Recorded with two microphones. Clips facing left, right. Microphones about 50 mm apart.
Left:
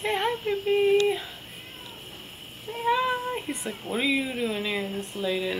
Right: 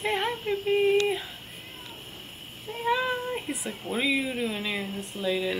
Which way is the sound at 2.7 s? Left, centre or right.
Centre.